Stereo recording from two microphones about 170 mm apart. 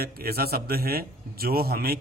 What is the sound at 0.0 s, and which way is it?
A man's voice, 65° right (ahead or behind).